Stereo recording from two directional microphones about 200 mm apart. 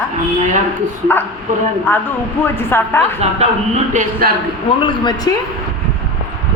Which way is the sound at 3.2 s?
35° right (ahead or behind).